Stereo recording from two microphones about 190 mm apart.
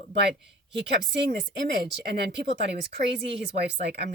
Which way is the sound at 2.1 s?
60° right (ahead or behind).